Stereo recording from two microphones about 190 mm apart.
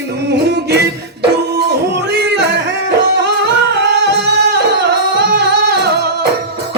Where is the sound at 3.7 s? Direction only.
65° right (ahead or behind).